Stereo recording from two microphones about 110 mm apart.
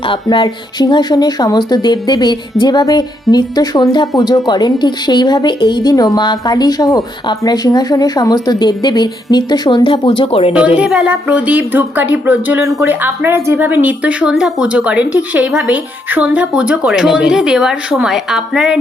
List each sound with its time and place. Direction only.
0.1 s a woman's voice: 50° left (ahead or behind)
10.5 s speech: 10° right (ahead or behind)